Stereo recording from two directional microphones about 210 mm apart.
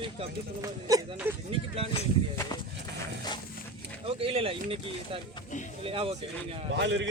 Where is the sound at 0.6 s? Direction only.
15° right (ahead or behind).